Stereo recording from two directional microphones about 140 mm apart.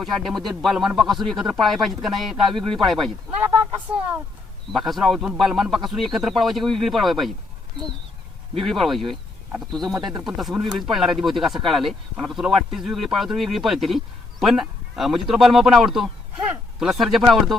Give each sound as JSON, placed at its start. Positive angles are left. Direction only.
{"t": 0.0, "sound": "speech", "side_deg": 0}
{"t": 4.7, "sound": "speech", "side_deg": 0}
{"t": 8.5, "sound": "speech", "side_deg": 0}